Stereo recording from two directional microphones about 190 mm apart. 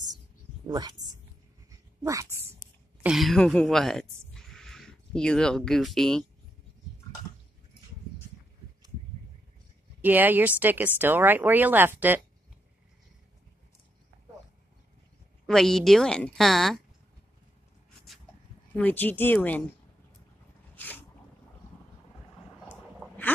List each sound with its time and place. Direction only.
0.7 s a woman's voice: 20° right (ahead or behind)
2.0 s speech: 15° right (ahead or behind)
3.0 s a woman's voice: centre (ahead or behind)
4.3 s a sound: centre (ahead or behind)
10.0 s speech: 10° right (ahead or behind)
15.4 s a woman's voice: centre (ahead or behind)
18.8 s speech: 10° left (ahead or behind)
20.7 s sneeze: 10° left (ahead or behind)
22.7 s dog: 5° left (ahead or behind)